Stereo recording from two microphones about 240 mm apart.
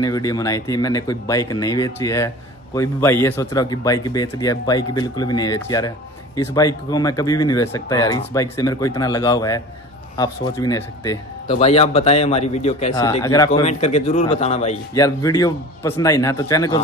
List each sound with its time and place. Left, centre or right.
0.0 s speech: centre
11.4 s a man's voice: left
12.9 s speech: centre
13.5 s a man's voice: left
15.0 s speech: centre